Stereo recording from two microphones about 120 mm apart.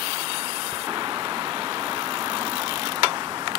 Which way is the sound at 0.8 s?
35° right (ahead or behind).